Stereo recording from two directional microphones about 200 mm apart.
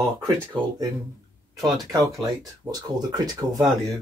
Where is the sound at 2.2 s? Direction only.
15° right (ahead or behind).